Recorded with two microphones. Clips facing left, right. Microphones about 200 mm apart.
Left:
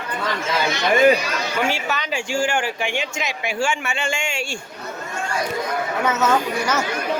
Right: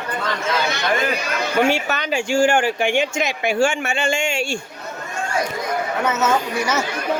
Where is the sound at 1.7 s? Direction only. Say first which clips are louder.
Right 4 dB; 55° right (ahead or behind).